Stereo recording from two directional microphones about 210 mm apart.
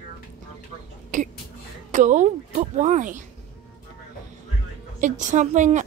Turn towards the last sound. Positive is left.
turn(degrees=-35)  # may be behind; listen again after turning